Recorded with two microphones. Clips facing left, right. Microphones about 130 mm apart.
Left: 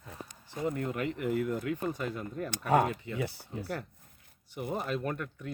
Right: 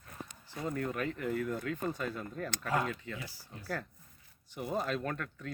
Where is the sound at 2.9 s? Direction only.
15° left (ahead or behind).